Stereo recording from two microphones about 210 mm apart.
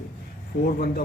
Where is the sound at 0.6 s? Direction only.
45° left (ahead or behind).